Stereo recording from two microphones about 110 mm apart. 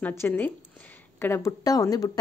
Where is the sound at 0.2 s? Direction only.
15° left (ahead or behind).